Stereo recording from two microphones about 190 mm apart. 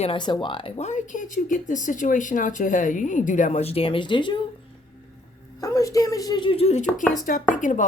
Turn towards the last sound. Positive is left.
turn(degrees=40)  # may be behind; listen again after turning